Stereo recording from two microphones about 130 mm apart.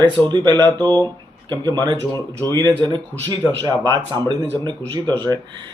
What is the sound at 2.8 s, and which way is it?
Speech, 35° right (ahead or behind).